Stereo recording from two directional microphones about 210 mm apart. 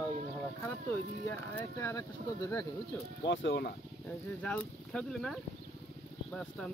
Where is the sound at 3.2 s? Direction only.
55° left (ahead or behind).